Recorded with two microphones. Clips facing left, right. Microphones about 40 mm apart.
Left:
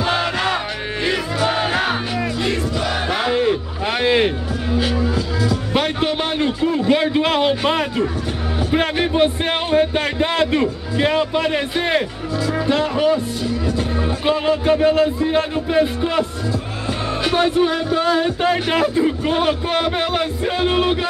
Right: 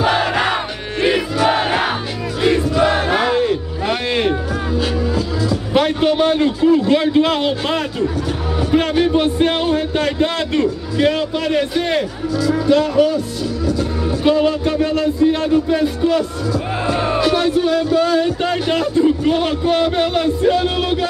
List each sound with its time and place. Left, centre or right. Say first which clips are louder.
0.0 s battle cry: right 3 dB; centre
1.0 s crowd: right 5 dB; centre
2.8 s battle cry: right 6 dB; centre
3.3 s a sound: right 1 dB; centre
4.7 s music: even; centre
5.5 s a man's voice: right 5 dB; centre
7.6 s music: left 1 dB; left
9.1 s a man's voice: right 2 dB; centre
12.4 s music: right 4 dB; left
14.2 s music: right 3 dB; left
18.5 s a man's voice: even; centre
20.1 s music: right 5 dB; centre